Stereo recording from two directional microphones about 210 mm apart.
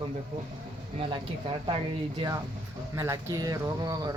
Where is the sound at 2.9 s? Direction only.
15° right (ahead or behind).